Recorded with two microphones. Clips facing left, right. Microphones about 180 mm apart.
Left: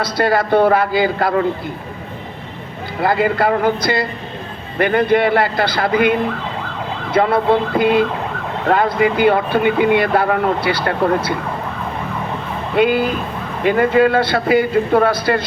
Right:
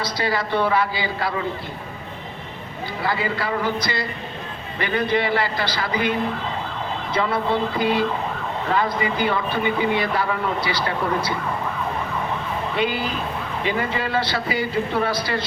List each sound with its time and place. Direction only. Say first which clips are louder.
0.0 s a man's voice: left 8 dB; 55° left (ahead or behind)
3.0 s a man's voice: left 9 dB; 55° left (ahead or behind)
12.7 s speech: left 11 dB; 55° left (ahead or behind)